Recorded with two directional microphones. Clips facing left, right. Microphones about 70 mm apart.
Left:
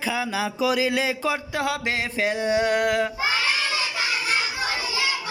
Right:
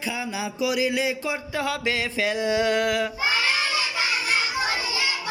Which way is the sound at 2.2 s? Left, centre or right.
Left.